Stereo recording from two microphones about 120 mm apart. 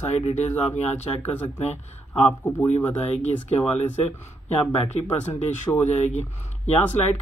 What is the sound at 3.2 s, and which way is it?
Speech, 65° left (ahead or behind).